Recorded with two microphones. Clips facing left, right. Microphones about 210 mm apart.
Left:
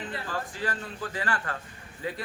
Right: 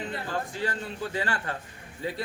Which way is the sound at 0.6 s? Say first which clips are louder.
Right 2 dB; 25° right (ahead or behind).